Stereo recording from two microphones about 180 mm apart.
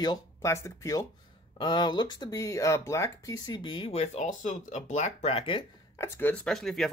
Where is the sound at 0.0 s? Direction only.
20° left (ahead or behind).